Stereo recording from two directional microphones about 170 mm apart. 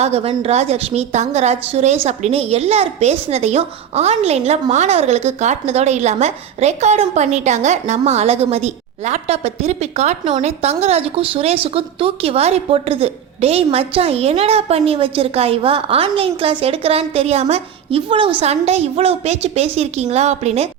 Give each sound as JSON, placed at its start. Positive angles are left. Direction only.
{"t": 0.0, "sound": "a woman's voice", "side_deg": -35}